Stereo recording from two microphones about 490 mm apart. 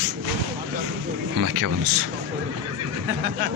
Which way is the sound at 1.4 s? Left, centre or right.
Right.